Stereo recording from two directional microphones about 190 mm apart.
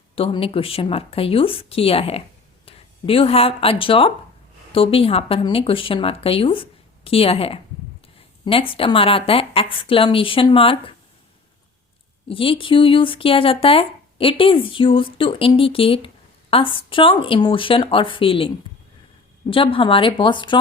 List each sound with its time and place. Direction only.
0.2 s speech: 30° left (ahead or behind)
12.3 s speech: 30° left (ahead or behind)